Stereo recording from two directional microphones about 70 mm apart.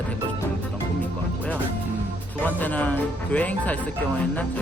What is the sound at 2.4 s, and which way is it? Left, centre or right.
Speech, left.